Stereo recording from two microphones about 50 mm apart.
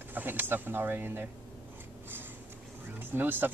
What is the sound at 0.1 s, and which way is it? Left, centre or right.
Speech, right.